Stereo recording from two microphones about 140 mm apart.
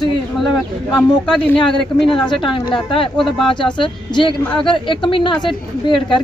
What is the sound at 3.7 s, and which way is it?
Speech, 35° left (ahead or behind).